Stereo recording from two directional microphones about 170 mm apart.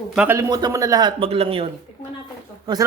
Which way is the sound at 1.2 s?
35° right (ahead or behind).